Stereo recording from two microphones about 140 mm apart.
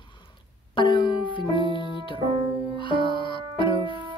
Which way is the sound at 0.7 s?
35° left (ahead or behind).